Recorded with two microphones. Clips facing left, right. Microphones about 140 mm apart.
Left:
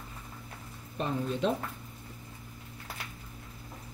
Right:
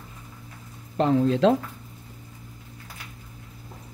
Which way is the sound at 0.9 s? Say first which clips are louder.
Right 11 dB; 90° right.